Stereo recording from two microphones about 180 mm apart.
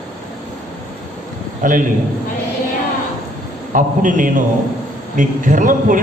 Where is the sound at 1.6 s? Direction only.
45° right (ahead or behind).